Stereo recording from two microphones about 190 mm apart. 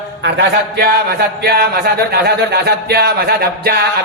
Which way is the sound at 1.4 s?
55° right (ahead or behind).